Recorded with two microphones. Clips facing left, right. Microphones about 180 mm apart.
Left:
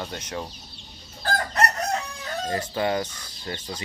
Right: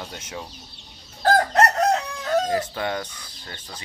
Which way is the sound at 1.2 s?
90° right.